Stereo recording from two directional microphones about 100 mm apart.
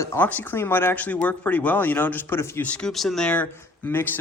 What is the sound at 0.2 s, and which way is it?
Speech, 15° left (ahead or behind).